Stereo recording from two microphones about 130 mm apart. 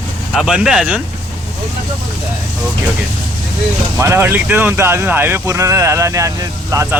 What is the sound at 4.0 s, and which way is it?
Speech, 20° right (ahead or behind).